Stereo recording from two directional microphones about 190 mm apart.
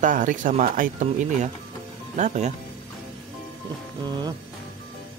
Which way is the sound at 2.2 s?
40° right (ahead or behind).